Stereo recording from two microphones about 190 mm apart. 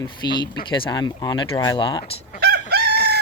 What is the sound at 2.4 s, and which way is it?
Chicken, 55° right (ahead or behind).